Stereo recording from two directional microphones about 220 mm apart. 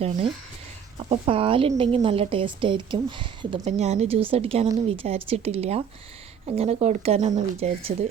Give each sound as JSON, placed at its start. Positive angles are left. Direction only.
{"t": 0.9, "sound": "a woman's voice", "side_deg": -25}